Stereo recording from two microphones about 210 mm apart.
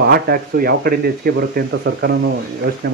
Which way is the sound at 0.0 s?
45° right (ahead or behind).